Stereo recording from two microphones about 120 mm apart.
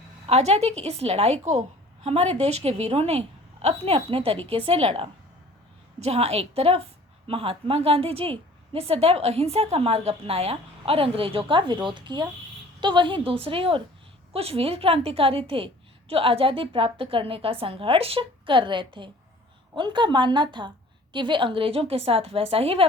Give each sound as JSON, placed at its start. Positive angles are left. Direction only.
{"t": 0.3, "sound": "a woman's voice", "side_deg": -65}